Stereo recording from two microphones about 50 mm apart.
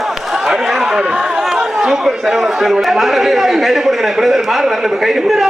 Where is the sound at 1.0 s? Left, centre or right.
Right.